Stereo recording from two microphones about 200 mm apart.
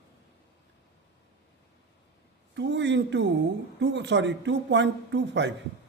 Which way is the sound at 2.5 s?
60° right (ahead or behind).